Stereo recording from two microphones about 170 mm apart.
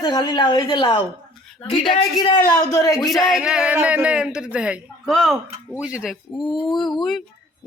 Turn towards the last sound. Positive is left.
turn(degrees=0)  # may be behind; listen again after turning